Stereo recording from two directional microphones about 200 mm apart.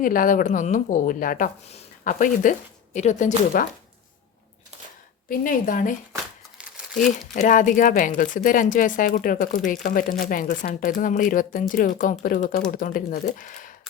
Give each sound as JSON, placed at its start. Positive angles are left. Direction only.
{"t": 0.0, "sound": "a woman's voice", "side_deg": 45}
{"t": 5.3, "sound": "speech", "side_deg": 45}
{"t": 7.4, "sound": "a woman's voice", "side_deg": 40}